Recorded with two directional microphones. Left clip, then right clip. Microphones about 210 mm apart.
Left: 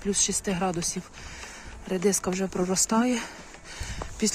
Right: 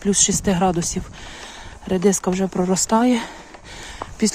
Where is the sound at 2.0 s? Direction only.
15° right (ahead or behind).